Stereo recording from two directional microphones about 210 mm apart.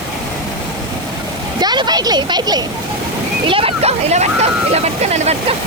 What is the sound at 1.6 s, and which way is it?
Speech, 20° right (ahead or behind).